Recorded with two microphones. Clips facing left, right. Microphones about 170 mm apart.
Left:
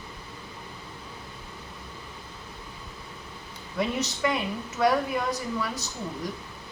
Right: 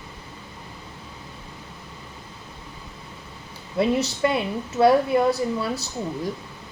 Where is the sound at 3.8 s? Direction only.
30° right (ahead or behind).